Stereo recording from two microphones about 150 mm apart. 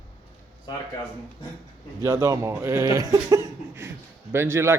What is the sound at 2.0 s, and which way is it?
Speech, 20° right (ahead or behind).